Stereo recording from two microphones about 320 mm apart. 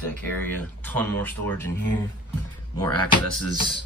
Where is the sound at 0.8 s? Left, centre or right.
Centre.